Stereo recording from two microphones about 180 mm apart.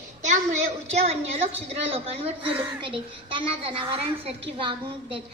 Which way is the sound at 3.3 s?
25° right (ahead or behind).